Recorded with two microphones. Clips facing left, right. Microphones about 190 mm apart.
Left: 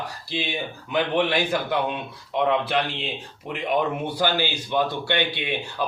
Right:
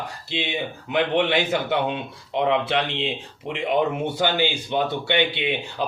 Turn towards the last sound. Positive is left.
turn(degrees=-20)  # may be behind; listen again after turning